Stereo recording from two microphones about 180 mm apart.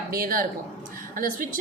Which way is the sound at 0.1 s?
55° right (ahead or behind).